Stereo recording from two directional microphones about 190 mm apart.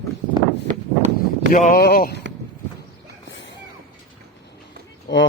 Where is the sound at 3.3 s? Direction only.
75° left (ahead or behind).